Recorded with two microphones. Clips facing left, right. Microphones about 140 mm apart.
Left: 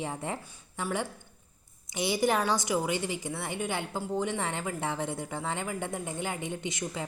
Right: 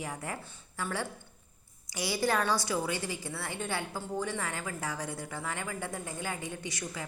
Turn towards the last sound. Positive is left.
turn(degrees=25)  # may be behind; listen again after turning